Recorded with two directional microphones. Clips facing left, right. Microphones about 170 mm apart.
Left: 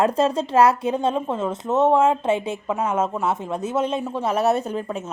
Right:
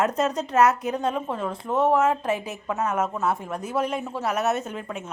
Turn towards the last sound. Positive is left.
turn(degrees=35)  # may be behind; listen again after turning